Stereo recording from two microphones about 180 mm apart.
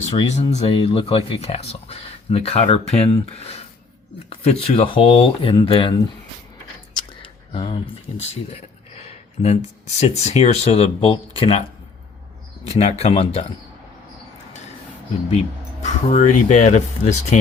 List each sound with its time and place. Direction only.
0.1 s speech: 35° left (ahead or behind)
6.9 s a sound: 30° left (ahead or behind)
9.0 s speech: 35° left (ahead or behind)
12.6 s speech: 35° left (ahead or behind)
15.8 s speech: 40° left (ahead or behind)